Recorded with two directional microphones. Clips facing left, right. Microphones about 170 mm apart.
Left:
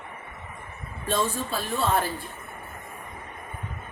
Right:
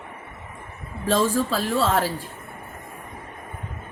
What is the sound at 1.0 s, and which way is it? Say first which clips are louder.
A man's voice: right 6 dB; 90° right.